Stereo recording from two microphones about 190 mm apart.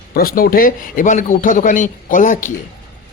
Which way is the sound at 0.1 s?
50° left (ahead or behind).